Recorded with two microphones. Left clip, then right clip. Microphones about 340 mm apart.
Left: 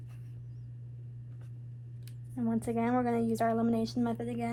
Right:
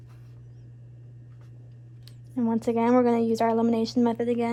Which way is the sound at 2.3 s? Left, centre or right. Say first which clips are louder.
Right 8 dB; right.